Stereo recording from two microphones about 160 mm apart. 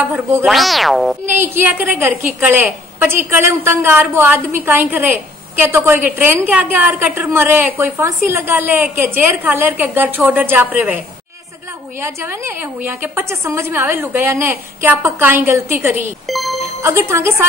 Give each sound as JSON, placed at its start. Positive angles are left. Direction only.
{"t": 0.5, "sound": "music", "side_deg": 0}
{"t": 1.2, "sound": "a woman's voice", "side_deg": -15}
{"t": 12.0, "sound": "a woman's voice", "side_deg": -15}
{"t": 16.3, "sound": "music", "side_deg": 0}
{"t": 16.8, "sound": "a woman's voice", "side_deg": -15}